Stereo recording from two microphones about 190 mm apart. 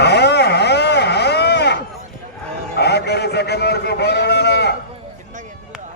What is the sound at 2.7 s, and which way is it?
A man's voice, 60° left (ahead or behind).